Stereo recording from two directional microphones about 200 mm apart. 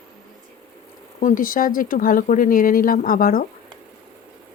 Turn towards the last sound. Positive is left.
turn(degrees=45)  # may be behind; listen again after turning